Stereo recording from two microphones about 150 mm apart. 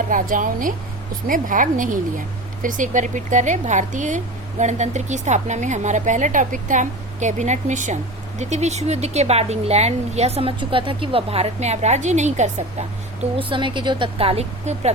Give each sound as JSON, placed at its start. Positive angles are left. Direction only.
{"t": 0.1, "sound": "a woman's voice", "side_deg": -65}
{"t": 13.4, "sound": "a woman's voice", "side_deg": -35}